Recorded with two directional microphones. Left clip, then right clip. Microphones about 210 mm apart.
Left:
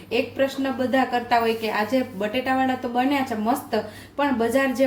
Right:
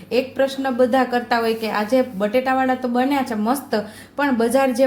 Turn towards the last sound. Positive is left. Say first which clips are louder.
# right 4 dB
turn(degrees=-35)  # may be behind; listen again after turning